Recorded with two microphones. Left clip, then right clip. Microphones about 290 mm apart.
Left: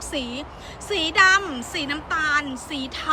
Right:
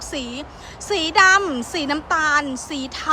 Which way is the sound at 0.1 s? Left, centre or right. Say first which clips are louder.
Left 1 dB; centre.